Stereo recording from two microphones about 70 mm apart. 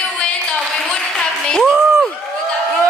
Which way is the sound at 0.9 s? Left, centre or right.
Centre.